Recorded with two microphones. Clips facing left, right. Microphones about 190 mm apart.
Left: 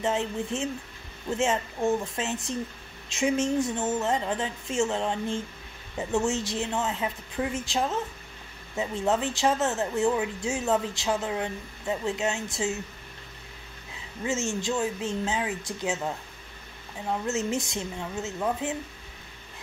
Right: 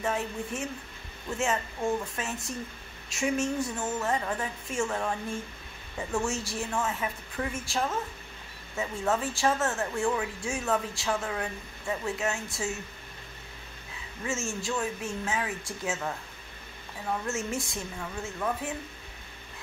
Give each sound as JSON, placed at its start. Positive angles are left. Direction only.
{"t": 0.0, "sound": "speech", "side_deg": 25}
{"t": 14.2, "sound": "speech", "side_deg": 20}